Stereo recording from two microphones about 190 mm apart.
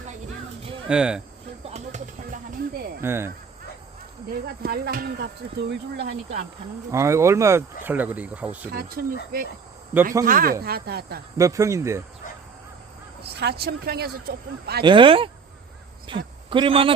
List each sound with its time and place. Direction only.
0.9 s speech: 5° right (ahead or behind)
1.6 s a sound: 35° right (ahead or behind)
3.0 s speech: 10° right (ahead or behind)
4.4 s speech: 55° right (ahead or behind)
6.9 s speech: 15° right (ahead or behind)
8.7 s speech: 55° right (ahead or behind)
11.3 s speech: 15° right (ahead or behind)
13.2 s speech: 60° right (ahead or behind)
14.8 s a man's voice: 25° right (ahead or behind)